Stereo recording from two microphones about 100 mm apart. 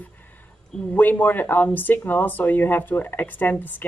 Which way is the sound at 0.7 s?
10° left (ahead or behind).